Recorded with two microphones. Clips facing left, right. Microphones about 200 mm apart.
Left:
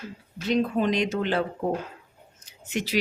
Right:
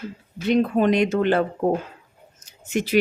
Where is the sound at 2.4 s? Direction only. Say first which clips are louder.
Right 5 dB; 50° right (ahead or behind).